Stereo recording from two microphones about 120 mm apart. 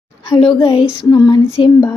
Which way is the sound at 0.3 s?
45° left (ahead or behind).